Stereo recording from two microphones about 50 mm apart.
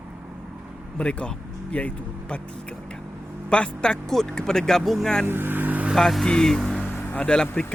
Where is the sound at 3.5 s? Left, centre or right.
Centre.